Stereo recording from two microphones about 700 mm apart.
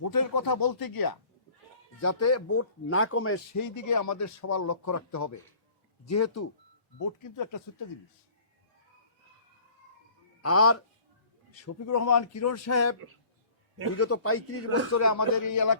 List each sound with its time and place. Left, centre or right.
0.0 s speech: left
10.4 s speech: centre